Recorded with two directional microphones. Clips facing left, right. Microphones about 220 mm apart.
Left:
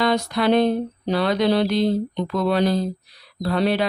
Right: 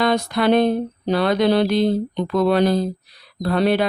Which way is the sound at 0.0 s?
50° right (ahead or behind).